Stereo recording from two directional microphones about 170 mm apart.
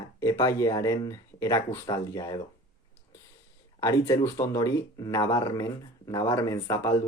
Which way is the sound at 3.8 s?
20° left (ahead or behind).